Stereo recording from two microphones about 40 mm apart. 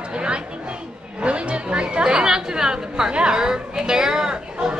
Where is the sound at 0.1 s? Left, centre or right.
Right.